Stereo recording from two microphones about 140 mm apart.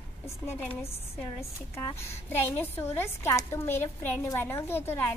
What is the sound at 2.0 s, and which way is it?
A woman's voice, 15° left (ahead or behind).